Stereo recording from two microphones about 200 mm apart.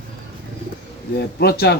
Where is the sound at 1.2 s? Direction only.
50° left (ahead or behind).